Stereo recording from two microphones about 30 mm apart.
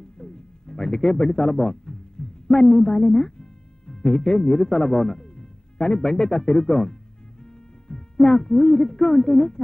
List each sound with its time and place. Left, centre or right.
0.2 s speech: left